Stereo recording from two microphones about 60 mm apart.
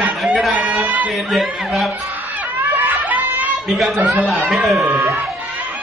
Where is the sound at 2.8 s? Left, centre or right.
Right.